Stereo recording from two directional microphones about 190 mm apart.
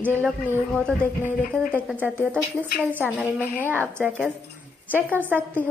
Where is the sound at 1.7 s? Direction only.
10° right (ahead or behind).